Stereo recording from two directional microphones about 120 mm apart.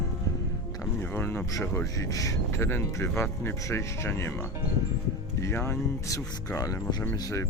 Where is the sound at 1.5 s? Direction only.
30° left (ahead or behind).